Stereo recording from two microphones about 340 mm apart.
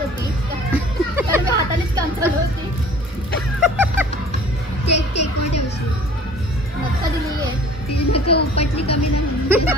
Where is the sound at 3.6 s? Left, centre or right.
Centre.